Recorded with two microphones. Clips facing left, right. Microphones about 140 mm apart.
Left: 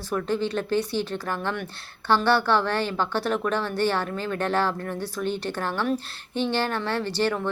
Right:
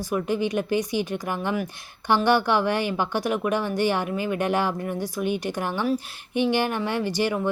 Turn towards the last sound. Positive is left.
turn(degrees=-10)  # may be behind; listen again after turning